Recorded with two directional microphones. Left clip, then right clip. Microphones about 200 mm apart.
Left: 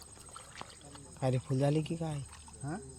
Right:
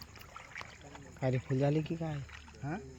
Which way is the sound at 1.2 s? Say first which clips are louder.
Even; centre (ahead or behind).